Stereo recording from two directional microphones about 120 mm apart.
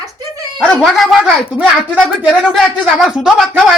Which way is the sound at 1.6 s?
15° right (ahead or behind).